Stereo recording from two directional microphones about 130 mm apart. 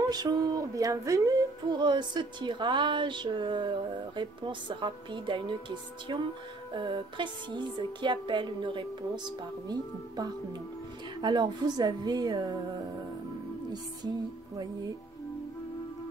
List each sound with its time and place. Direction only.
0.1 s speech: 30° right (ahead or behind)